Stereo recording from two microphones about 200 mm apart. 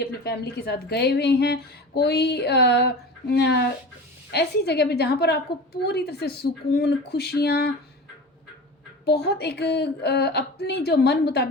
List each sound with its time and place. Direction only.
0.0 s a woman's voice: 55° left (ahead or behind)
9.0 s speech: 55° left (ahead or behind)